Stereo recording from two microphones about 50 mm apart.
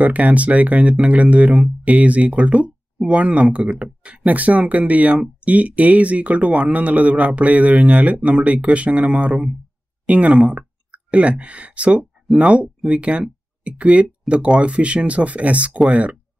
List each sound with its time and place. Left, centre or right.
0.0 s speech: right